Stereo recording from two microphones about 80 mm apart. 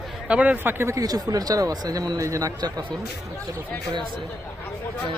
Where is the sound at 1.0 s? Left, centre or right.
Right.